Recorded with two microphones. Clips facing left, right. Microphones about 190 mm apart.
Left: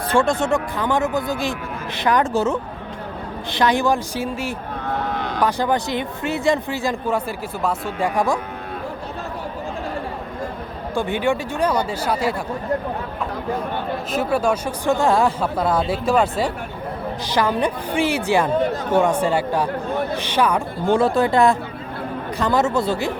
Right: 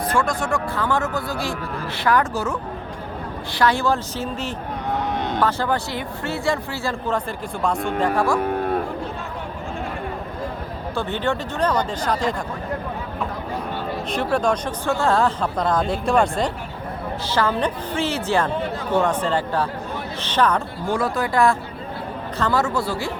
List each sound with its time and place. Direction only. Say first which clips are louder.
0.1 s speech: left 6 dB; 25° left (ahead or behind); by 4.5 s 10° left (ahead or behind)
5.1 s a sound: right 1 dB; 20° right (ahead or behind)
5.4 s speech: left 3 dB; 15° left (ahead or behind)
7.6 s speech: right 1 dB; 5° left (ahead or behind)
8.4 s a sound: right 9 dB; 50° right (ahead or behind)
10.9 s speech: left 3 dB; 10° left (ahead or behind)
14.1 s speech: left 1 dB; 5° left (ahead or behind)
17.2 s speech: left 1 dB; 15° left (ahead or behind)
20.8 s speech: left 7 dB; 25° left (ahead or behind)